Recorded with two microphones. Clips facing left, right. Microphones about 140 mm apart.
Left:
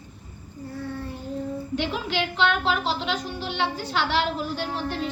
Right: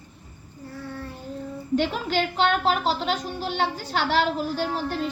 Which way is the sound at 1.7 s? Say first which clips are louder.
Right 5 dB; 45° right (ahead or behind).